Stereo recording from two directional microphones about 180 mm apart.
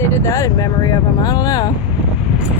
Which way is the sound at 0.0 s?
15° left (ahead or behind).